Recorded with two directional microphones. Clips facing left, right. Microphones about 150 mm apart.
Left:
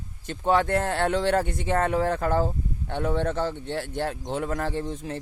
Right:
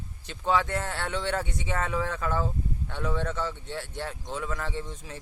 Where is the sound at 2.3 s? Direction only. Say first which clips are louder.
Left 5 dB; 40° left (ahead or behind).